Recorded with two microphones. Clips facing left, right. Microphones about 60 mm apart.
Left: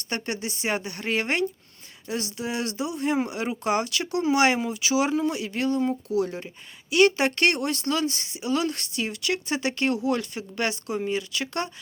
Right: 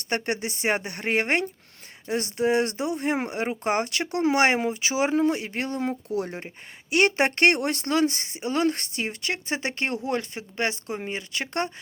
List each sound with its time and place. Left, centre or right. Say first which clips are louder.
0.1 s speech: right 3 dB; right